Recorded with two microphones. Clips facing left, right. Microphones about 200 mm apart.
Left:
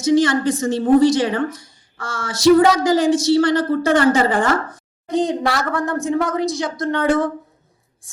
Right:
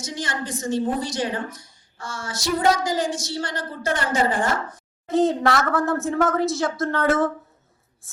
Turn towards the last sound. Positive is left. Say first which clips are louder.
# left 3 dB
turn(degrees=0)  # may be behind; listen again after turning